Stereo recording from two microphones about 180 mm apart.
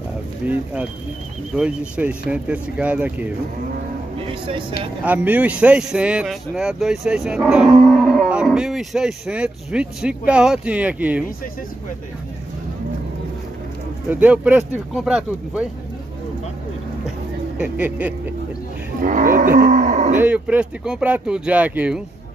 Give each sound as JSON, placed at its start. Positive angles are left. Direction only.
{"t": 1.5, "sound": "speech", "side_deg": -5}
{"t": 4.3, "sound": "speech", "side_deg": -30}
{"t": 5.0, "sound": "speech", "side_deg": -10}
{"t": 14.2, "sound": "speech", "side_deg": -10}
{"t": 17.6, "sound": "speech", "side_deg": -10}
{"t": 19.0, "sound": "livestock", "side_deg": -50}
{"t": 20.2, "sound": "speech", "side_deg": -5}